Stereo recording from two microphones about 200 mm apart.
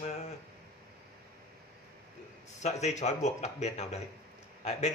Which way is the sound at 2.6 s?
35° left (ahead or behind).